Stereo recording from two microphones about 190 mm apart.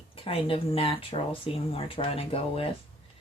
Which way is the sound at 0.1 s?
30° left (ahead or behind).